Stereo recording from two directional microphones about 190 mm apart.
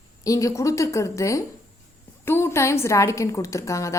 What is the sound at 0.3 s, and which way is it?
A woman's voice, 15° left (ahead or behind).